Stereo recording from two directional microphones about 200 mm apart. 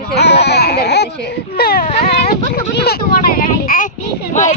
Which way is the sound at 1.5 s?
50° left (ahead or behind).